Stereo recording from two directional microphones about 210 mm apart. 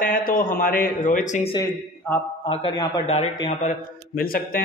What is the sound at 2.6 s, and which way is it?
A man's voice, 25° left (ahead or behind).